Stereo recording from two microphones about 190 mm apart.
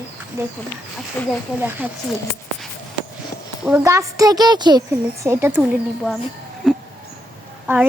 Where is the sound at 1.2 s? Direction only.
5° left (ahead or behind).